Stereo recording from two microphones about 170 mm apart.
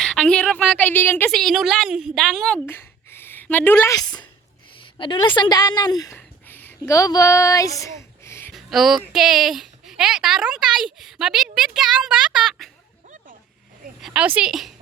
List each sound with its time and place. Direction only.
0.0 s a woman's voice: 5° left (ahead or behind)
2.6 s a sound: 15° left (ahead or behind)
4.9 s a woman's voice: 30° left (ahead or behind)
8.5 s speech: centre (ahead or behind)
14.0 s speech: 5° right (ahead or behind)